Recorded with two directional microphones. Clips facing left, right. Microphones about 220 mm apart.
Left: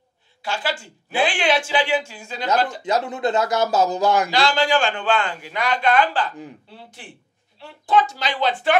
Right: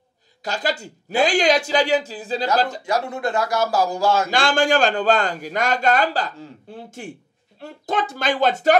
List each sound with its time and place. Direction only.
0.4 s speech: 40° right (ahead or behind)
2.8 s a man's voice: 20° left (ahead or behind)
4.3 s a man's voice: 50° right (ahead or behind)